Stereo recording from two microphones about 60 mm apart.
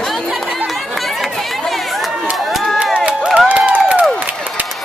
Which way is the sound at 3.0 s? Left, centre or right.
Right.